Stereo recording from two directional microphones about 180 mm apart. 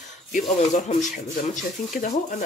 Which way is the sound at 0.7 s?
40° left (ahead or behind).